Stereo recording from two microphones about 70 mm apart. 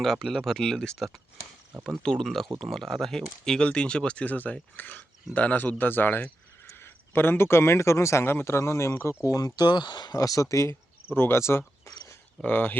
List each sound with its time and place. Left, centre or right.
0.0 s speech: centre; by 9.1 s left
9.2 s speech: left
10.2 s speech: left
11.1 s speech: left
12.4 s speech: left